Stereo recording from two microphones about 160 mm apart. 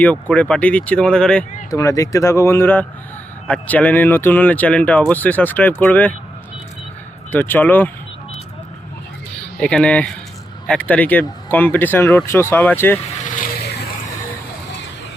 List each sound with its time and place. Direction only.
0.0 s speech: 10° left (ahead or behind)
1.7 s speech: 20° left (ahead or behind)
7.3 s speech: 10° left (ahead or behind)
9.6 s speech: 5° left (ahead or behind)
13.0 s vehicle: 50° left (ahead or behind); by 13.9 s 85° left